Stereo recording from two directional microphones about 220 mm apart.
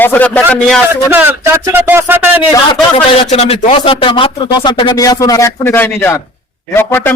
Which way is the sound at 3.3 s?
30° left (ahead or behind).